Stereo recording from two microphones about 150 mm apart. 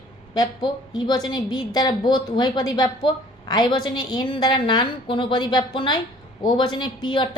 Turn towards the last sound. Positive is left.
turn(degrees=30)  # may be behind; listen again after turning